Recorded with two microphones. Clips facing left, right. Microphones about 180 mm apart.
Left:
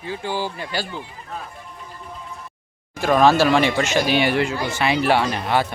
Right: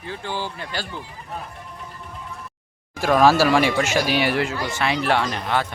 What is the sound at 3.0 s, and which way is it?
Speech, 5° right (ahead or behind).